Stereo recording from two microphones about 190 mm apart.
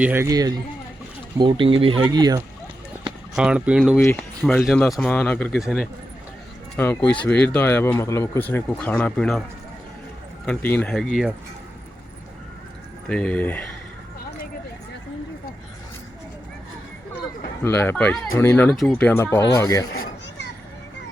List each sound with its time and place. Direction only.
0.0 s speech: 10° right (ahead or behind)
3.3 s speech: 5° right (ahead or behind)
3.9 s speech: 10° left (ahead or behind)
6.7 s speech: 10° left (ahead or behind)
10.4 s speech: 10° left (ahead or behind)
13.1 s speech: 5° left (ahead or behind)
17.6 s speech: 10° left (ahead or behind)